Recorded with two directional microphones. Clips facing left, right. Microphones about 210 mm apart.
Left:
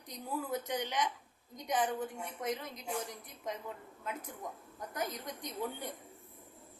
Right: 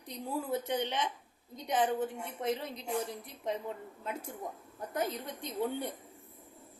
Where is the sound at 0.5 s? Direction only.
25° right (ahead or behind).